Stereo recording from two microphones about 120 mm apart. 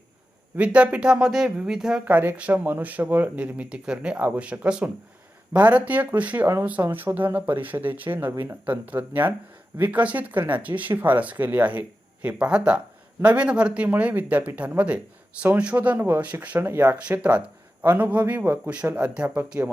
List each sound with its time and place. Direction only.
0.5 s speech: 10° right (ahead or behind)
2.0 s speech: 15° right (ahead or behind)